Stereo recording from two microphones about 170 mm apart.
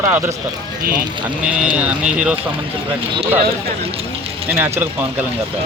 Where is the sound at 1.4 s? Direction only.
5° right (ahead or behind).